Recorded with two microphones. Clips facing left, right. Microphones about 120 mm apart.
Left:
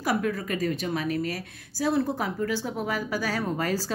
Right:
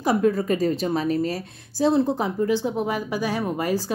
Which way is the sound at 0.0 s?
25° right (ahead or behind).